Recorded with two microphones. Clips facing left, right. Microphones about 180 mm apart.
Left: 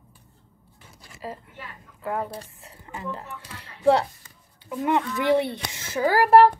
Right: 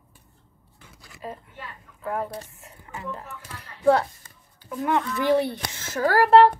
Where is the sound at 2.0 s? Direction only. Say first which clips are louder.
Even; 25° left (ahead or behind).